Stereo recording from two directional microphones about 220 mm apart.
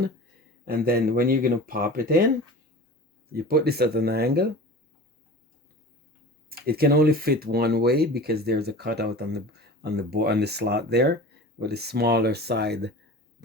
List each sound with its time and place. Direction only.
0.6 s speech: 40° right (ahead or behind)
3.3 s speech: 45° right (ahead or behind)
6.5 s speech: 45° right (ahead or behind)